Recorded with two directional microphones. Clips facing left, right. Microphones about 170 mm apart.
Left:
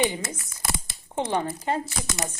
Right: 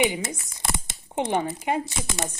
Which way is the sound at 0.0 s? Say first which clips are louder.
Right 2 dB; 15° right (ahead or behind).